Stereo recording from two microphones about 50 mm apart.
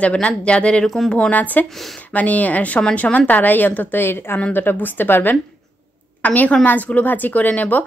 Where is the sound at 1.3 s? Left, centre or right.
Left.